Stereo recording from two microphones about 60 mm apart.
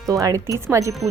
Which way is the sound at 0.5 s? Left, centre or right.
Right.